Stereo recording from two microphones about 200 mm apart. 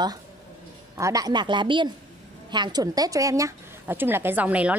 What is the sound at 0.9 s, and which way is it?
A woman's voice, 15° right (ahead or behind).